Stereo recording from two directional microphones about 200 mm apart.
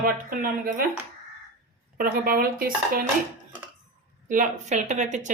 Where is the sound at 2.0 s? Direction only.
45° right (ahead or behind).